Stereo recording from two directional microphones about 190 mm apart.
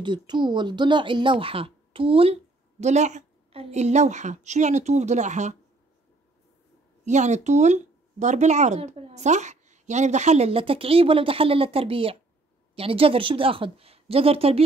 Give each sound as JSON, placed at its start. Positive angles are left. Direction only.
{"t": 0.0, "sound": "speech", "side_deg": -25}
{"t": 7.1, "sound": "speech", "side_deg": -40}